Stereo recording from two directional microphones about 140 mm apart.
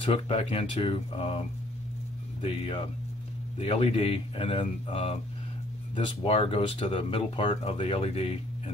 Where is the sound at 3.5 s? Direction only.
45° left (ahead or behind).